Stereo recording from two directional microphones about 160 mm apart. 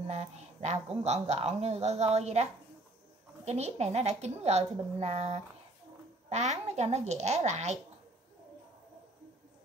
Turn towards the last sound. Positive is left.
turn(degrees=-45)  # may be behind; listen again after turning